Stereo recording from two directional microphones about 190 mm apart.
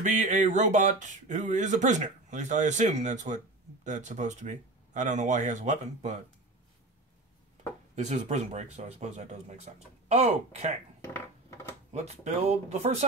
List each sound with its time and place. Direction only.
0.0 s speech: 40° right (ahead or behind)
7.9 s speech: 35° right (ahead or behind)
11.9 s speech: 35° right (ahead or behind)